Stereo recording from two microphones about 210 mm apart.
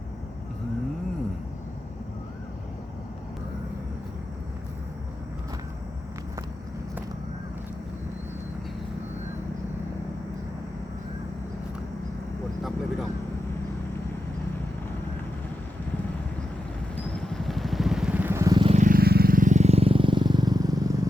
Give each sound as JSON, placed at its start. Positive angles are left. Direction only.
{"t": 16.9, "sound": "vehicle", "side_deg": 0}
{"t": 18.8, "sound": "vehicle", "side_deg": -45}